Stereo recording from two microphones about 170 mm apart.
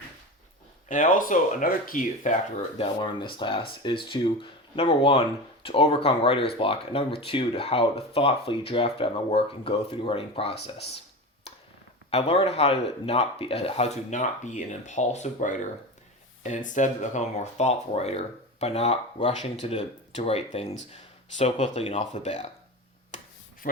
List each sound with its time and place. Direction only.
0.9 s speech: 50° left (ahead or behind)
2.7 s speech: 30° left (ahead or behind)
11.5 s a sound: 35° left (ahead or behind)
12.1 s speech: 35° left (ahead or behind)